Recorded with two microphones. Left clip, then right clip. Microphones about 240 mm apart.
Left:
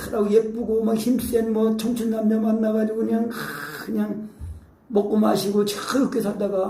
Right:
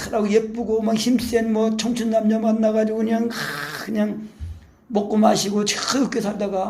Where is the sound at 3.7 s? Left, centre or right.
Right.